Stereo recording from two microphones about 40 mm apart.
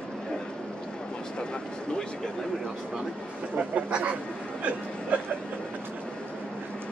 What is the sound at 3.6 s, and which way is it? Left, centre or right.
Speech, right.